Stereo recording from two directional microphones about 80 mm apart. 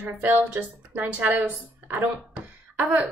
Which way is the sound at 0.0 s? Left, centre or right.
Centre.